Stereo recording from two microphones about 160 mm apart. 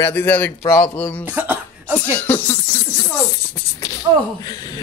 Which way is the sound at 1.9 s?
10° left (ahead or behind).